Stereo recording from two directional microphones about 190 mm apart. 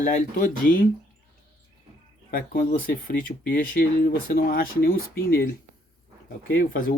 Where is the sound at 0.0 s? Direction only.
45° left (ahead or behind).